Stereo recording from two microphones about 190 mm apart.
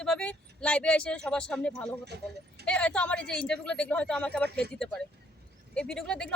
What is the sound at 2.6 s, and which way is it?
Speech, 5° left (ahead or behind).